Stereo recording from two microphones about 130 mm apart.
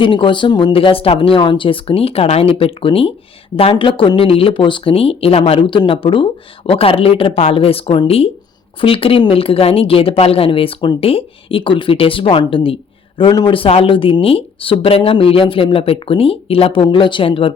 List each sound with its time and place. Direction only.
0.0 s speech: 40° left (ahead or behind)